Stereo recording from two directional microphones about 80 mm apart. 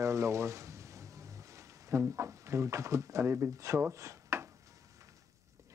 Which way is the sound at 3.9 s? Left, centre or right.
Right.